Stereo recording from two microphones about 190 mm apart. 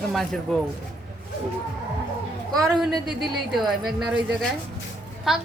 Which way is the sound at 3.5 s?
Centre (ahead or behind).